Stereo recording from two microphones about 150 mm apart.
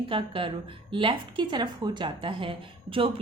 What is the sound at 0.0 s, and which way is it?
A woman's voice, 35° right (ahead or behind).